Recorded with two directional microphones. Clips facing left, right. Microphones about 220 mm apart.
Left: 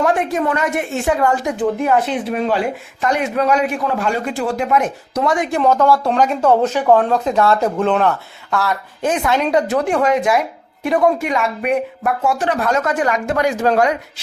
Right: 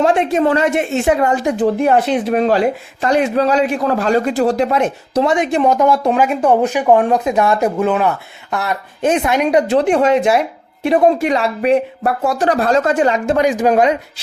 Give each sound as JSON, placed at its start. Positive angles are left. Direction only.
{"t": 0.0, "sound": "speech", "side_deg": -25}
{"t": 1.5, "sound": "a man's voice", "side_deg": -35}
{"t": 8.4, "sound": "speech", "side_deg": -20}